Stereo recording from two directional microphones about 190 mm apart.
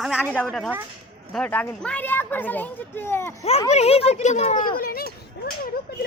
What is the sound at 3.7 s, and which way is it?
Speech, 35° left (ahead or behind).